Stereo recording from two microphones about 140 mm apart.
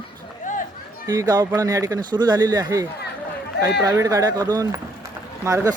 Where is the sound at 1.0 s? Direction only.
25° right (ahead or behind).